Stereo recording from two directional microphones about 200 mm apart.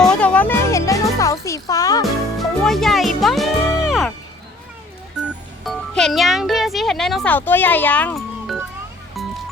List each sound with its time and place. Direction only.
0.0 s music: 5° left (ahead or behind)
2.6 s music: centre (ahead or behind)
5.2 s music: centre (ahead or behind)
5.6 s speech: centre (ahead or behind)
9.2 s music: centre (ahead or behind)